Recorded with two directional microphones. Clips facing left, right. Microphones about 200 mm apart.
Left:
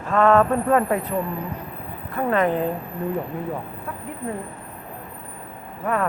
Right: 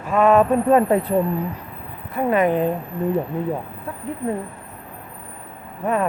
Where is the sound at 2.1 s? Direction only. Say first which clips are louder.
Right 3 dB; 15° right (ahead or behind).